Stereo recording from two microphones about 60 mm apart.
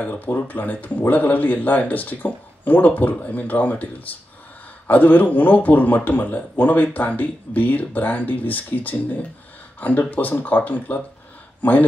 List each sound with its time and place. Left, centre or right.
0.0 s a man's voice: left